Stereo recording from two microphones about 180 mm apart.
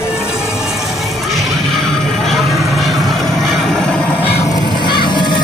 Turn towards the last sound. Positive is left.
turn(degrees=25)  # may be behind; listen again after turning